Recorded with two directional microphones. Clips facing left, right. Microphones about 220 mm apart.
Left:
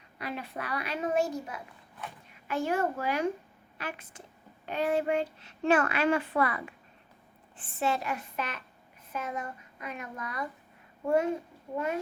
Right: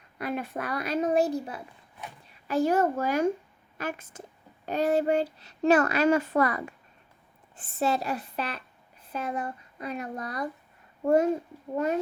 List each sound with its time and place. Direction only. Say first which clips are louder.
0.2 s a woman's voice: right 5 dB; 50° right (ahead or behind)